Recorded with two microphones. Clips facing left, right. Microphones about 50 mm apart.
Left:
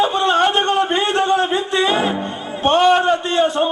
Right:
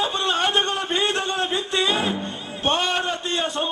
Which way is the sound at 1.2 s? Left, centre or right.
Centre.